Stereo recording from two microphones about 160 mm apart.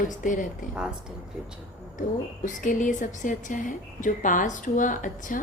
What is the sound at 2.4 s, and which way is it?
A woman's voice, 55° left (ahead or behind).